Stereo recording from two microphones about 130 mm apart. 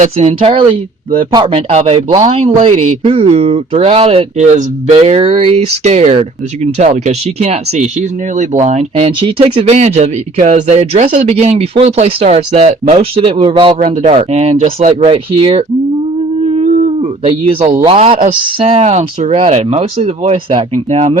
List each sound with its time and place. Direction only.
0.0 s speech: 55° right (ahead or behind)
1.2 s a man's voice: 40° right (ahead or behind)
1.5 s speech: 50° right (ahead or behind)
13.9 s speech: 70° right (ahead or behind)
14.2 s speech: 55° right (ahead or behind)
16.5 s a sound: 55° right (ahead or behind)
17.8 s speech: 45° right (ahead or behind)
20.5 s speech: 70° right (ahead or behind)